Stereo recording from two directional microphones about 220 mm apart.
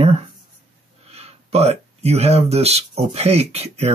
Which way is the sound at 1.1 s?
30° right (ahead or behind).